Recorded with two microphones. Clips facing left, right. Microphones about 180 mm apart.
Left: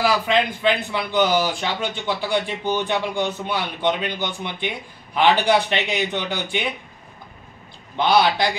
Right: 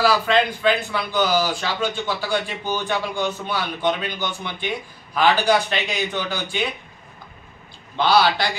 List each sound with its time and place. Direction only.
0.0 s a man's voice: 15° left (ahead or behind)
8.0 s a man's voice: 20° left (ahead or behind)